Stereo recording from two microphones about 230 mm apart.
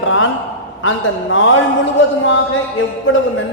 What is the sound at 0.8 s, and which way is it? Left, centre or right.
Speech, left.